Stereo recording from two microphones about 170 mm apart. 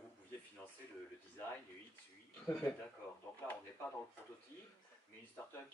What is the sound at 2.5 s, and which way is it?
Speech, 10° left (ahead or behind).